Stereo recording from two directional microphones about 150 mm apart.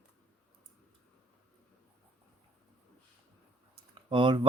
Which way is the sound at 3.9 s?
35° right (ahead or behind).